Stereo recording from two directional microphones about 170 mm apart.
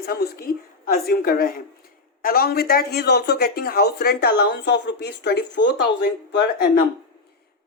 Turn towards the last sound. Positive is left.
turn(degrees=75)  # may be behind; listen again after turning